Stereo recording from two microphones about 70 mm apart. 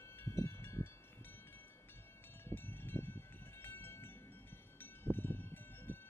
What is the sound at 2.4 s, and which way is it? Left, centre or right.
Cowbell, left.